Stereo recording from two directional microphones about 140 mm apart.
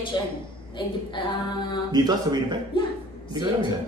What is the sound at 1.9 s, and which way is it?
Speech, 30° right (ahead or behind).